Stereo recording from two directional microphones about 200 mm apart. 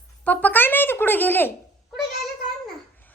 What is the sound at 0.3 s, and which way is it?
Speech, 10° left (ahead or behind).